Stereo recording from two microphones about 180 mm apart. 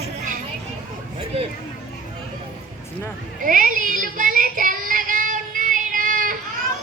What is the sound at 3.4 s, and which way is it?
Child singing, 50° right (ahead or behind).